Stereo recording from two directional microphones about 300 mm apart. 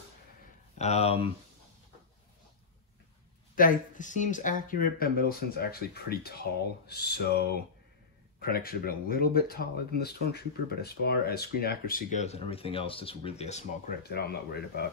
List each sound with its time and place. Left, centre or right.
0.7 s speech: left
3.5 s speech: left